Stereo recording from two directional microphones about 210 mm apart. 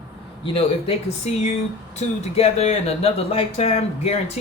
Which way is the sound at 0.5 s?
30° left (ahead or behind).